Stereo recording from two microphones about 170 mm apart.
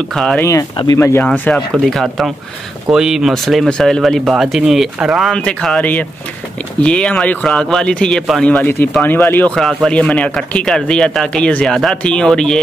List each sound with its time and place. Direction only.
0.1 s speech: 5° left (ahead or behind)
0.4 s speech: 15° left (ahead or behind)